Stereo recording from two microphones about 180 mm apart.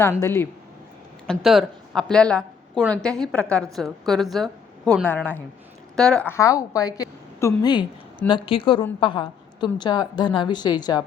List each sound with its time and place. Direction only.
0.0 s a woman's voice: 15° left (ahead or behind)
1.3 s a woman's voice: centre (ahead or behind); by 11.0 s 20° left (ahead or behind)